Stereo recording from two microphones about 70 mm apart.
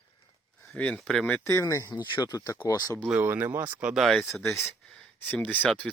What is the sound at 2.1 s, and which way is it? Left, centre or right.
Speech, left.